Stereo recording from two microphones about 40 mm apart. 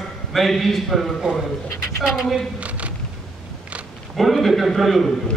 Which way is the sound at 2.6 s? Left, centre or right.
Right.